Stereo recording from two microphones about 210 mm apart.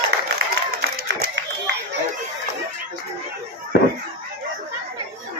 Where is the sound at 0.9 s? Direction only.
45° right (ahead or behind).